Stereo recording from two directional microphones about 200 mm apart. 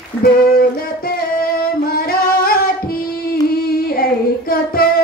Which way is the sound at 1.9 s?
50° left (ahead or behind).